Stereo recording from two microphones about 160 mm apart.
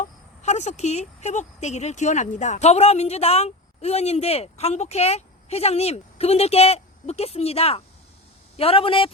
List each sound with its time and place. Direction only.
0.4 s speech: 45° left (ahead or behind)